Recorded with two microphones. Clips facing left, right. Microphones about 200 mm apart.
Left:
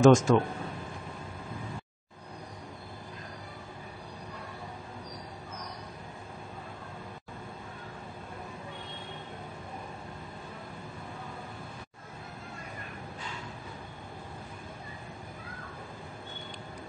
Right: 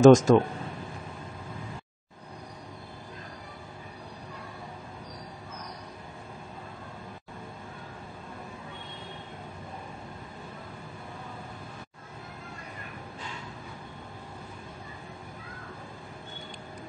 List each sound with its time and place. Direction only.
0.0 s speech: 40° right (ahead or behind)